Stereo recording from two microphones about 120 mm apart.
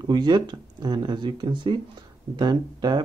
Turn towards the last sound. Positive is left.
turn(degrees=-35)  # may be behind; listen again after turning